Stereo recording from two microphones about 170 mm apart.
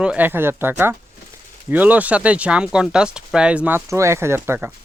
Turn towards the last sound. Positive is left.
turn(degrees=-15)  # may be behind; listen again after turning